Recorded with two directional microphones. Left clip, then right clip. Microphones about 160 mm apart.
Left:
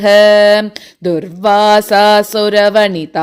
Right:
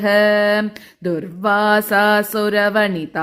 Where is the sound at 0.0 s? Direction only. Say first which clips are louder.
Left 8 dB; 40° left (ahead or behind).